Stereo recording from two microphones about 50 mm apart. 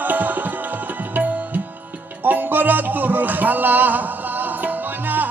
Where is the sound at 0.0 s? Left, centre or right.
Right.